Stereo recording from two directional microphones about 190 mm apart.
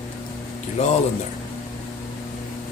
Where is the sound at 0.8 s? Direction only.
35° left (ahead or behind).